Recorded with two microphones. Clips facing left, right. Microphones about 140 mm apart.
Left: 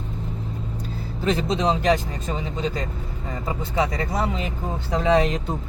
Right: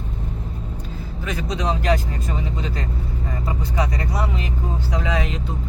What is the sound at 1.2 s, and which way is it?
Speech, 25° left (ahead or behind).